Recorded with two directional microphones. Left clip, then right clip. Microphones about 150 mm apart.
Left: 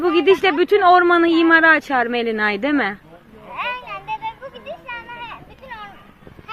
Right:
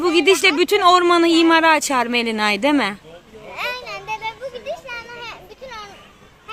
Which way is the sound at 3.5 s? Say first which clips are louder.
Even; 25° right (ahead or behind).